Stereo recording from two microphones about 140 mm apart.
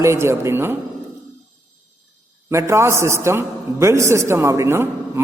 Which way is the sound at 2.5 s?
20° right (ahead or behind).